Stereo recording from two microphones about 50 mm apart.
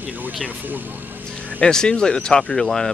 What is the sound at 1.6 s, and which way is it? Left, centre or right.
Speech, centre.